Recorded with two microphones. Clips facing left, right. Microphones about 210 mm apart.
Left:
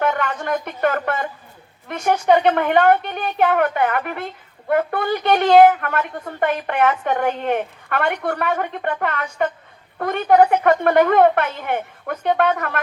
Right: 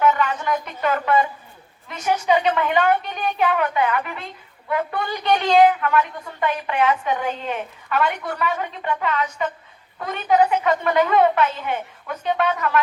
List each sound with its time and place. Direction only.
0.0 s a woman's voice: 60° left (ahead or behind)